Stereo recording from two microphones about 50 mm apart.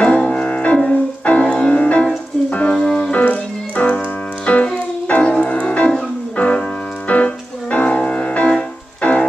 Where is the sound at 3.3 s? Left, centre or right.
Left.